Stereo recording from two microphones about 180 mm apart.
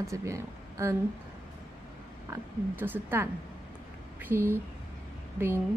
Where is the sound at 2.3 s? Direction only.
10° right (ahead or behind).